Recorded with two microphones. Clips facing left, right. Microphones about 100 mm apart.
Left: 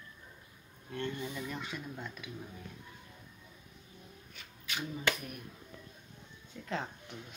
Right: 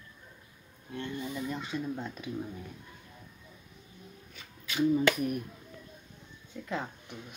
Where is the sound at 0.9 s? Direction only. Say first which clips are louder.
Right 1 dB; 20° right (ahead or behind).